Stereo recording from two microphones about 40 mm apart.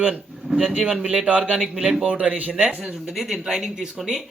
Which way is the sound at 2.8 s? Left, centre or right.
Centre.